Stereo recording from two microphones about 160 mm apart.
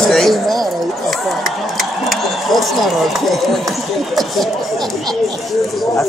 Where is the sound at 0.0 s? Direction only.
Centre (ahead or behind).